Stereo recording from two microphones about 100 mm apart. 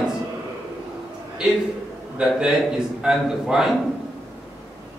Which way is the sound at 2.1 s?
5° right (ahead or behind).